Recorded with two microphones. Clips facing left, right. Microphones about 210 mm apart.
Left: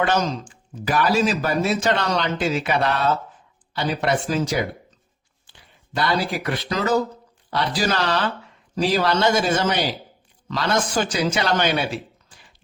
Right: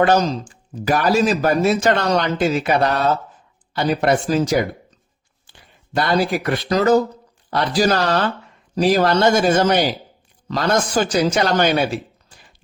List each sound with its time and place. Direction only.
0.0 s speech: 40° right (ahead or behind)
5.9 s speech: 45° right (ahead or behind)